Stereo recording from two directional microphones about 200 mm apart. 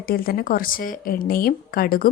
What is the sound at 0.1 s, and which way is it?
Speech, 45° left (ahead or behind).